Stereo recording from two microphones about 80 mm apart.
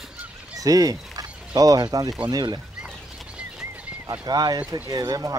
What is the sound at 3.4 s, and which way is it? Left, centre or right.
Bird flight, centre.